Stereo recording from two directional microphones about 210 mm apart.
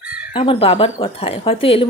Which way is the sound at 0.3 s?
25° left (ahead or behind).